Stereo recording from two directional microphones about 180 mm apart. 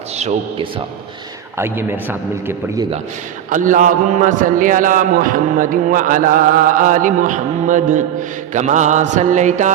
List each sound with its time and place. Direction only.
0.2 s mantra: 40° right (ahead or behind)
1.5 s a man's voice: 15° right (ahead or behind)
3.5 s a man's voice: 45° right (ahead or behind)
8.5 s mantra: 40° right (ahead or behind)